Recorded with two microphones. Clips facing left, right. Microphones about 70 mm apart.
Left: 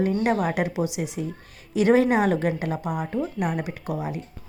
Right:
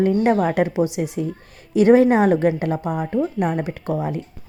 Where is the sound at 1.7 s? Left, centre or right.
Right.